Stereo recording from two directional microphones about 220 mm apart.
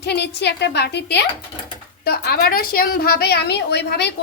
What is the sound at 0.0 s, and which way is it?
A woman's voice, 50° left (ahead or behind).